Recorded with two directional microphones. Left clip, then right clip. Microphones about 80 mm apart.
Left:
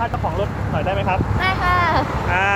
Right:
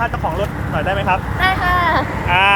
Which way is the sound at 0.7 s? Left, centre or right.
Centre.